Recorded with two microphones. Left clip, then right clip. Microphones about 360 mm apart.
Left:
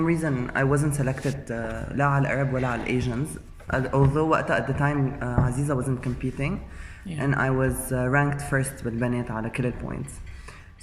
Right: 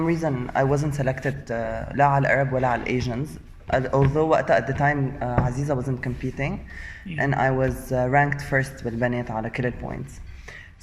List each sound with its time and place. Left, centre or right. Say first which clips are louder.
0.0 s speech: right 1 dB; centre
7.2 s speech: right 3 dB; centre